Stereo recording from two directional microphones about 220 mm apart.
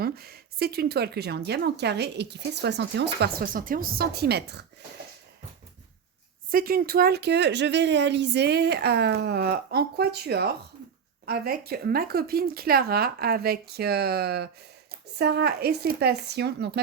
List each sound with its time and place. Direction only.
0.0 s speech: 45° right (ahead or behind)
6.5 s speech: 40° right (ahead or behind)